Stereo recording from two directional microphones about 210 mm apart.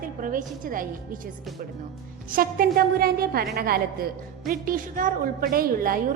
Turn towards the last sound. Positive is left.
turn(degrees=-45)  # may be behind; listen again after turning